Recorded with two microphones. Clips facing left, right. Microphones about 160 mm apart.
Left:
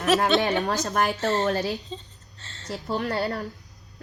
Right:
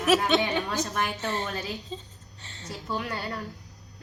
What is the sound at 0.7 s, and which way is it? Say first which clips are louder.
Speech: left 5 dB; 45° left (ahead or behind).